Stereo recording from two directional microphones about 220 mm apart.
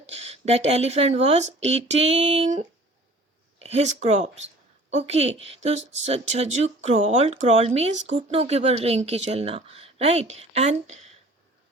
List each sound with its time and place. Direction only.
0.0 s speech: 30° right (ahead or behind)